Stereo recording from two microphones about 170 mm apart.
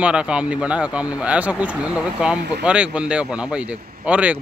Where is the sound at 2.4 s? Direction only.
75° right (ahead or behind).